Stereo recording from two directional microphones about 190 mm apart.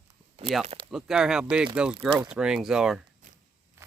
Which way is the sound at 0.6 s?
35° right (ahead or behind).